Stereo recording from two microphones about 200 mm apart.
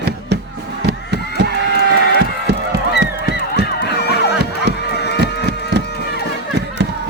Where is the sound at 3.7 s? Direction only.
55° left (ahead or behind).